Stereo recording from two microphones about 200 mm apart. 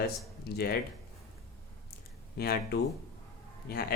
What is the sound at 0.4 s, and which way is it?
Speech, 55° left (ahead or behind).